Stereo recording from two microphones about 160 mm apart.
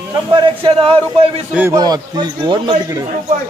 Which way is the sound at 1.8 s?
25° right (ahead or behind).